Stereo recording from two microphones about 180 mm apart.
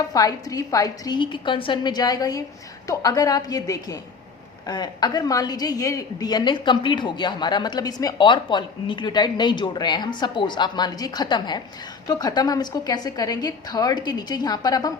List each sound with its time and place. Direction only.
0.1 s a woman's voice: 20° left (ahead or behind)